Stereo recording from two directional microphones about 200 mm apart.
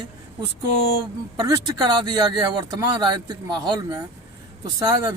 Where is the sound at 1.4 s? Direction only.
20° right (ahead or behind).